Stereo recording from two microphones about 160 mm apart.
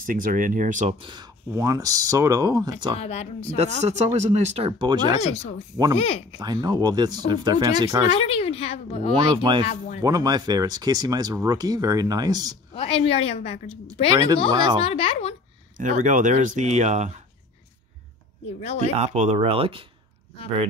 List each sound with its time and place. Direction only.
0.0 s speech: 60° right (ahead or behind)
0.9 s speech: 30° right (ahead or behind)
1.5 s speech: 20° right (ahead or behind)
3.0 s a woman's voice: 40° left (ahead or behind)
3.5 s speech: 45° right (ahead or behind); by 5.2 s 30° right (ahead or behind)
6.3 s speech: 25° right (ahead or behind)
8.1 s a woman's voice: 40° left (ahead or behind)
9.1 s speech: 30° right (ahead or behind)
12.7 s a woman's voice: 35° left (ahead or behind)
14.1 s speech: 25° right (ahead or behind)
14.8 s a woman's voice: 35° left (ahead or behind)
15.8 s speech: 50° right (ahead or behind)
18.8 s speech: 45° right (ahead or behind)